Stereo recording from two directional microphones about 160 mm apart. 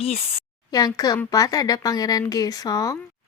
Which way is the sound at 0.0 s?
35° left (ahead or behind).